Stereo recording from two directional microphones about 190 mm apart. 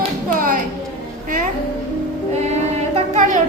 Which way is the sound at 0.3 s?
45° right (ahead or behind).